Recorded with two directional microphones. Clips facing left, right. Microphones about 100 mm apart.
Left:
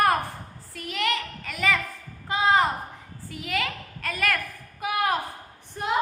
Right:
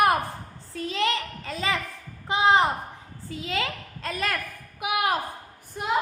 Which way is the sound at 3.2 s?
25° right (ahead or behind).